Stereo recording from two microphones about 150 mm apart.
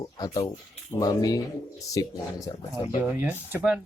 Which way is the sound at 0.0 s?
25° left (ahead or behind).